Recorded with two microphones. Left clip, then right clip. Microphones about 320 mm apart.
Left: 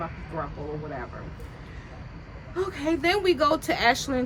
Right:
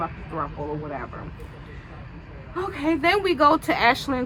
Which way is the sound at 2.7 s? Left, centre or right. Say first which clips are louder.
Right 4 dB; centre.